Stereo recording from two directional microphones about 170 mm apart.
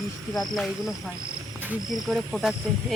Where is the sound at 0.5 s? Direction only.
Centre (ahead or behind).